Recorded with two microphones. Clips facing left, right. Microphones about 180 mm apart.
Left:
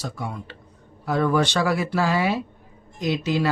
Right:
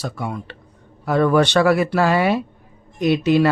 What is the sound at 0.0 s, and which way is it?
Speech, 65° right (ahead or behind).